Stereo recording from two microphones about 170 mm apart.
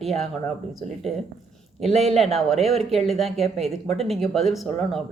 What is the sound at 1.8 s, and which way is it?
Speech, 40° right (ahead or behind).